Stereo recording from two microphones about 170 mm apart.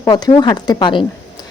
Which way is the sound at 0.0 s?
25° left (ahead or behind).